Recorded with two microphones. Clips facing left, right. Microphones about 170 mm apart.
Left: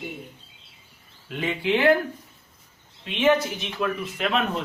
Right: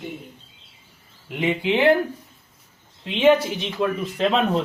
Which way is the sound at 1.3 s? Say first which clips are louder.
Right 2 dB; 20° right (ahead or behind).